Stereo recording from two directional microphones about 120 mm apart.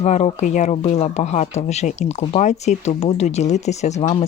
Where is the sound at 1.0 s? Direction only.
70° left (ahead or behind).